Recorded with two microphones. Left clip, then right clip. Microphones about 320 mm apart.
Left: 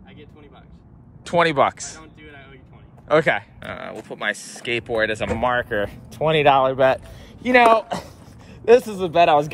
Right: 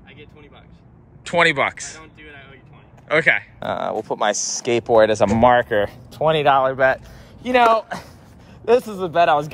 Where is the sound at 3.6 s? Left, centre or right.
Centre.